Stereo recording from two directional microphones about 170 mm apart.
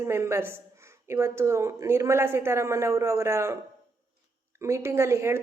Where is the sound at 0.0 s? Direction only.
15° right (ahead or behind).